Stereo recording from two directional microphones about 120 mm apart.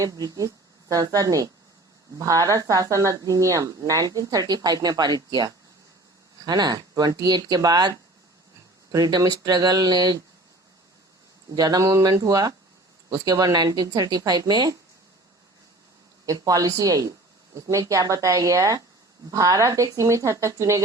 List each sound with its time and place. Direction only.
0.0 s speech: 30° right (ahead or behind)
11.5 s speech: 30° right (ahead or behind)
16.2 s speech: 30° right (ahead or behind)